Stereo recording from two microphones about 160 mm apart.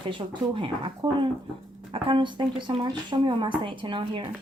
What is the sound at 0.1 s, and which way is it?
A woman's voice, 30° right (ahead or behind).